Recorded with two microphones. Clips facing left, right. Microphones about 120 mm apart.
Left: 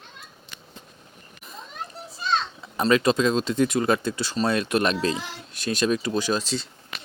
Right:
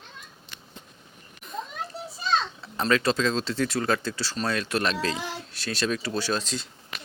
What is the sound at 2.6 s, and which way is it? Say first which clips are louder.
Speech: left 4 dB; 10° left (ahead or behind).